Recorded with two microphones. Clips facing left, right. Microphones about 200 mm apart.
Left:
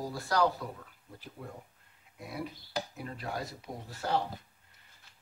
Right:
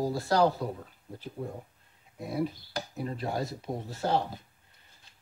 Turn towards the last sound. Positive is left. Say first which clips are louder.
# right 4 dB
turn(degrees=-25)  # may be behind; listen again after turning